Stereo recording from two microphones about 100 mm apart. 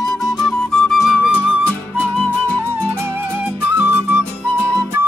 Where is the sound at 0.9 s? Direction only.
5° right (ahead or behind).